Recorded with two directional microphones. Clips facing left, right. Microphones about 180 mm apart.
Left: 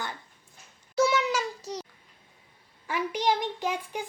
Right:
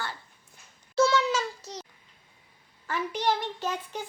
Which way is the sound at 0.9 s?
15° left (ahead or behind).